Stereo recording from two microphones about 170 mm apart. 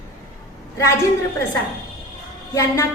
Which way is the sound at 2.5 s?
20° left (ahead or behind).